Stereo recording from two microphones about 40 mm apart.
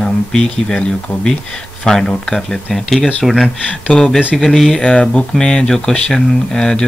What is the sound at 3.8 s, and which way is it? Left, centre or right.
Speech, left.